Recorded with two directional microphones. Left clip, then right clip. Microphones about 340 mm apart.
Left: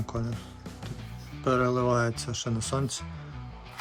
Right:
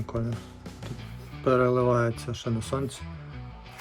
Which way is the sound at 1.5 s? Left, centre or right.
Centre.